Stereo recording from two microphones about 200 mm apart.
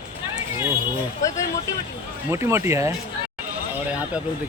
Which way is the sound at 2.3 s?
15° right (ahead or behind).